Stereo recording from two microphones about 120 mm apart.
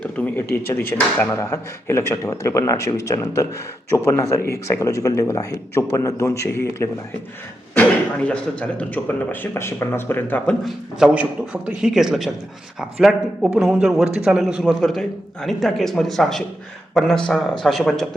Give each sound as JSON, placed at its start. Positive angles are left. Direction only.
{"t": 0.0, "sound": "speech", "side_deg": 10}
{"t": 7.8, "sound": "speech", "side_deg": 10}
{"t": 10.7, "sound": "speech", "side_deg": -5}